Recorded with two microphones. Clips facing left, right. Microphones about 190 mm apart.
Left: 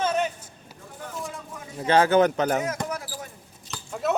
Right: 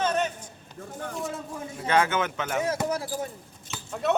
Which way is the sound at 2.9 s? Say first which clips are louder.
Right 5 dB; 30° right (ahead or behind).